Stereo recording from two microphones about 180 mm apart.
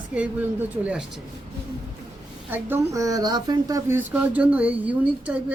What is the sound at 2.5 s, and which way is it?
A woman's voice, 10° right (ahead or behind).